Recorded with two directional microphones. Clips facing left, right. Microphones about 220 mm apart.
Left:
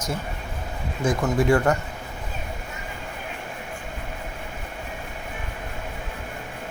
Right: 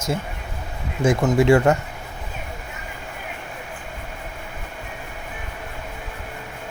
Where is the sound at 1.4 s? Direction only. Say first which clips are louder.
Right 4 dB; 25° right (ahead or behind).